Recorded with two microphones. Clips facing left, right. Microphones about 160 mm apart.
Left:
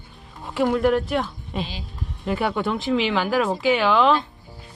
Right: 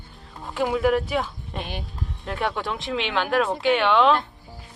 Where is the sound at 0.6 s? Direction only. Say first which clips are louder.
Left 2 dB; centre (ahead or behind).